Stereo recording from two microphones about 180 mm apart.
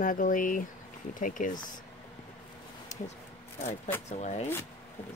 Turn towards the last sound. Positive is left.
turn(degrees=40)  # may be behind; listen again after turning